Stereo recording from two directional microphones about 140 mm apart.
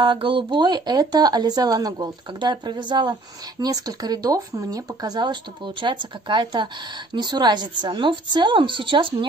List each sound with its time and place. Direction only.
0.0 s speech: 35° right (ahead or behind)